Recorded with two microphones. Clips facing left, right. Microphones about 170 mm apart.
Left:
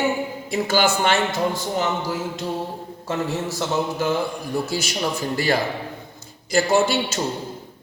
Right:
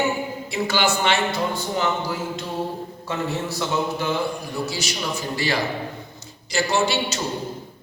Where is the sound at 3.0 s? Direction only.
45° left (ahead or behind).